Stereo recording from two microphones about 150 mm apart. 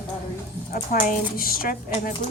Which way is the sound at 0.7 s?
70° left (ahead or behind).